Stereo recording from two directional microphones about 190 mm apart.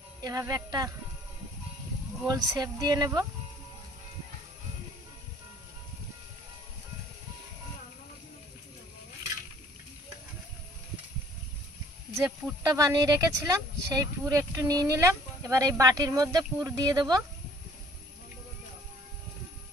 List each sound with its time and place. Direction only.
0.2 s speech: 20° right (ahead or behind)
2.2 s speech: 20° right (ahead or behind)
12.2 s speech: 15° right (ahead or behind)